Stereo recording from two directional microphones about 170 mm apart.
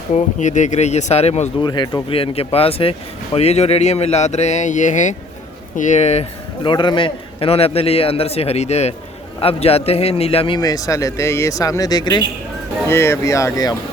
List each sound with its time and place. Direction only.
0.1 s speech: 45° left (ahead or behind)
1.6 s a man's voice: 25° left (ahead or behind)